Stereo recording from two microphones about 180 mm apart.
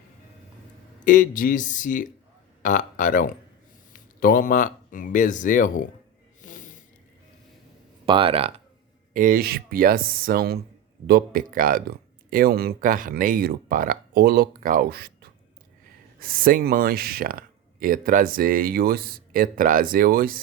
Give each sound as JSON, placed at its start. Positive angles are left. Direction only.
{"t": 0.9, "sound": "speech", "side_deg": 45}
{"t": 6.4, "sound": "a sound", "side_deg": 45}
{"t": 8.0, "sound": "speech", "side_deg": -30}
{"t": 9.1, "sound": "speech", "side_deg": -50}